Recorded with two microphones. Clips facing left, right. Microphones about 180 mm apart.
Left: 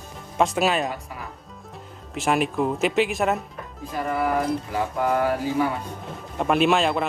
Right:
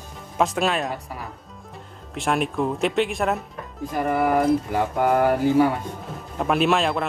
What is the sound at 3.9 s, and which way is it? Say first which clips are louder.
Speech: right 3 dB; 55° right (ahead or behind).